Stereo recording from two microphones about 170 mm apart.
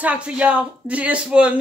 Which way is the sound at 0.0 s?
5° right (ahead or behind).